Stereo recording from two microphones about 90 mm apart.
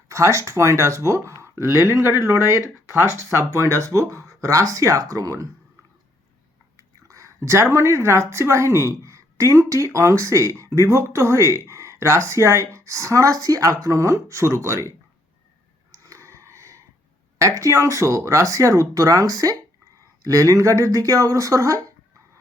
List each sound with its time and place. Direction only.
0.1 s speech: 35° right (ahead or behind)
6.7 s speech: 35° right (ahead or behind)
16.0 s a sound: 35° right (ahead or behind)
17.3 s speech: 35° right (ahead or behind)